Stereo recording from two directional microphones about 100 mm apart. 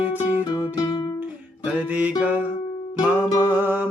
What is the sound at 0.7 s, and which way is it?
Music, 40° left (ahead or behind).